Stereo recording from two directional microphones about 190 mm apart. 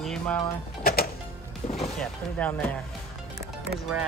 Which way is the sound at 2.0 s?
10° left (ahead or behind).